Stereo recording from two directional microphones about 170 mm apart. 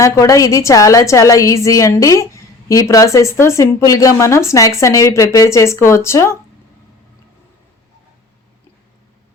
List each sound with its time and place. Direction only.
0.0 s a woman's voice: 20° left (ahead or behind)